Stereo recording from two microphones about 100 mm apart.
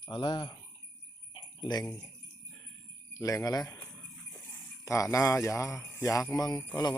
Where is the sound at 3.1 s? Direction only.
30° left (ahead or behind).